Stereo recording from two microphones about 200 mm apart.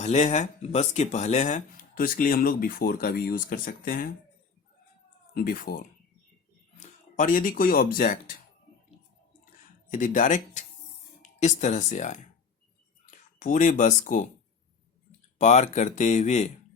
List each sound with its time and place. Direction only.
0.0 s speech: 35° left (ahead or behind)
5.3 s speech: 45° left (ahead or behind)
6.7 s speech: 40° left (ahead or behind)
9.9 s speech: 40° left (ahead or behind)
15.4 s speech: 35° left (ahead or behind)